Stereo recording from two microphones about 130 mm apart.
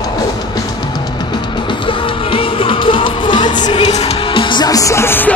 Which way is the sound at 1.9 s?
45° left (ahead or behind).